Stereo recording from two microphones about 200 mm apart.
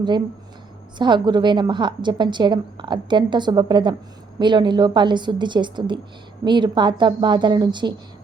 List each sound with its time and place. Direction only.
0.9 s a woman's voice: 20° right (ahead or behind)